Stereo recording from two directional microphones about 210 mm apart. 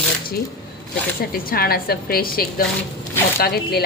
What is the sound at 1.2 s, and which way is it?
Speech, 45° left (ahead or behind).